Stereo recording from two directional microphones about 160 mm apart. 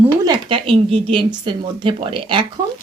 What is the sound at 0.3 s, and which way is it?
Speech, 35° right (ahead or behind).